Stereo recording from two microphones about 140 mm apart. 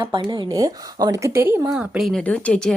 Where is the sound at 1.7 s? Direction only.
5° right (ahead or behind).